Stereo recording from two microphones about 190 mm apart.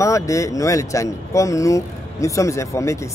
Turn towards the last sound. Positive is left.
turn(degrees=15)  # may be behind; listen again after turning